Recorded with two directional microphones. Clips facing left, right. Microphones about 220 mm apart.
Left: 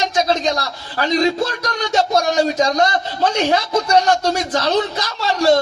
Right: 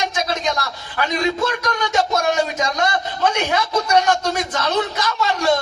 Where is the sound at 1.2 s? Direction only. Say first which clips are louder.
Left 2 dB; 35° left (ahead or behind).